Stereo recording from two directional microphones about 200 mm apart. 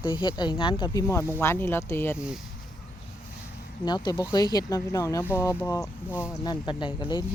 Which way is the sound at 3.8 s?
20° left (ahead or behind).